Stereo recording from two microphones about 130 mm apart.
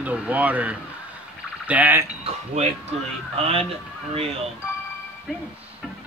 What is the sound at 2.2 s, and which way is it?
Speech, 55° right (ahead or behind).